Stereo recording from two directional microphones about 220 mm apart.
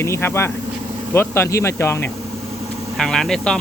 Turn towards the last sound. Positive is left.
turn(degrees=5)  # may be behind; listen again after turning